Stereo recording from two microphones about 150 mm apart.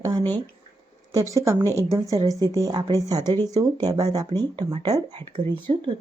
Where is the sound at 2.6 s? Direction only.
30° right (ahead or behind).